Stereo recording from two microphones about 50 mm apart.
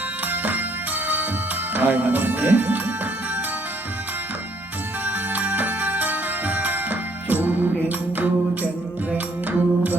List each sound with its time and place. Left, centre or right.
0.3 s music: right
1.7 s speech: right
5.0 s music: right